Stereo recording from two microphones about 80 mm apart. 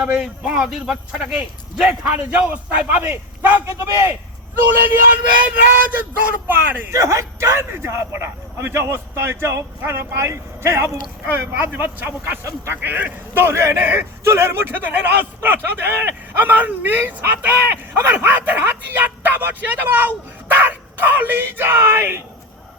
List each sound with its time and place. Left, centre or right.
0.0 s a man's voice: centre
1.9 s a man's voice: right
4.6 s a man's voice: right
6.9 s a man's voice: right